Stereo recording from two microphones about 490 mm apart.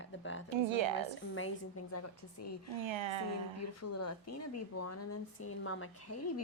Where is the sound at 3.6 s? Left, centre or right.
Left.